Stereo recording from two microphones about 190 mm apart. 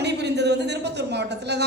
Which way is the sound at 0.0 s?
60° right (ahead or behind).